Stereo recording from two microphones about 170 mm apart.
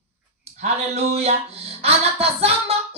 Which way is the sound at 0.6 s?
40° right (ahead or behind).